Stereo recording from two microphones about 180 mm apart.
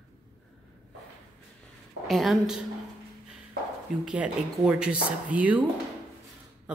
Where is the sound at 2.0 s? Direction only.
Centre (ahead or behind).